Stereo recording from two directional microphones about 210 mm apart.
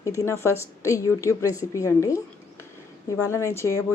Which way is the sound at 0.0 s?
15° left (ahead or behind).